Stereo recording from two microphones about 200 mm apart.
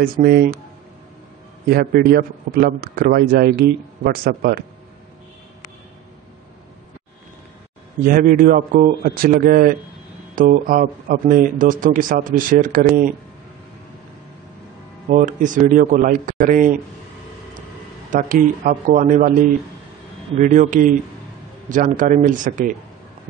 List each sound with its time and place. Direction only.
0.0 s a man's voice: 50° right (ahead or behind)
1.7 s a man's voice: 50° right (ahead or behind)
8.0 s a man's voice: 45° right (ahead or behind)
15.0 s a man's voice: 40° right (ahead or behind)
18.1 s a man's voice: 40° right (ahead or behind)
20.3 s a man's voice: 40° right (ahead or behind)